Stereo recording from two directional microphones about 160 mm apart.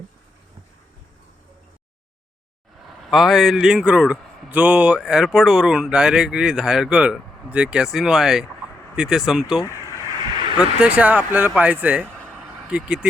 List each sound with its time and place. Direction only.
3.0 s speech: centre (ahead or behind)
10.0 s a sound: 25° right (ahead or behind)
10.6 s speech: 5° right (ahead or behind)
12.4 s vehicle: 5° right (ahead or behind)